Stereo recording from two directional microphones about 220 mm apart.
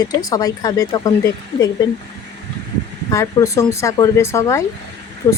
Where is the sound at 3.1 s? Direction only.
15° left (ahead or behind).